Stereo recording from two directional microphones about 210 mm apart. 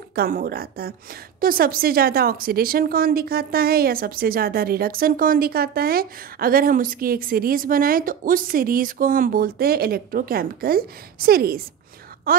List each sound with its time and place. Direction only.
0.1 s a woman's voice: 45° right (ahead or behind)